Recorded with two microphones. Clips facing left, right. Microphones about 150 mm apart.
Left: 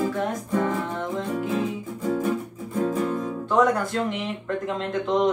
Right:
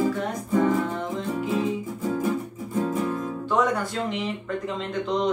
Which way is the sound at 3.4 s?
Centre (ahead or behind).